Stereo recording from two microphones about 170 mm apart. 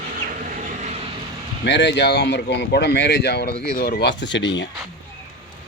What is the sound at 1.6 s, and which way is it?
Speech, 90° left.